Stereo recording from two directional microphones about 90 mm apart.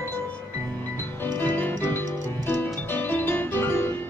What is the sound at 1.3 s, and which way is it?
Music, 20° left (ahead or behind).